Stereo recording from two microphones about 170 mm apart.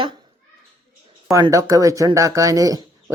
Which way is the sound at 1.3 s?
20° right (ahead or behind).